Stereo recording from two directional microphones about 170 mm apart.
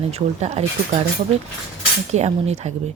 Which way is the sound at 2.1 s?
40° right (ahead or behind).